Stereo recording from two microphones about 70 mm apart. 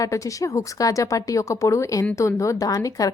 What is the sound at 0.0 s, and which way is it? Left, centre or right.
A woman's voice, left.